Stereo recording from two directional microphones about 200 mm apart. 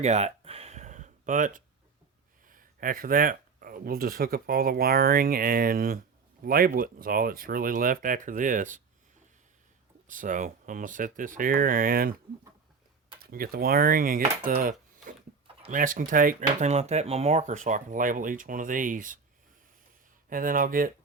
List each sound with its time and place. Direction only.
0.0 s a sound: 35° right (ahead or behind)
2.5 s speech: 45° right (ahead or behind)
10.1 s speech: 40° right (ahead or behind)
13.3 s speech: 45° right (ahead or behind)
20.3 s speech: 45° right (ahead or behind)